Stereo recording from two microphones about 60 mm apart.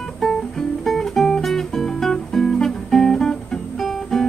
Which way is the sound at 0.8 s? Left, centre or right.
Centre.